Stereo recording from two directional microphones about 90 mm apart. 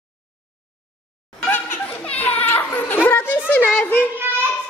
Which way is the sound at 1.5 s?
20° left (ahead or behind).